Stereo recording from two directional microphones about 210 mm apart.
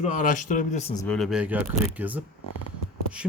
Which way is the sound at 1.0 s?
Centre (ahead or behind).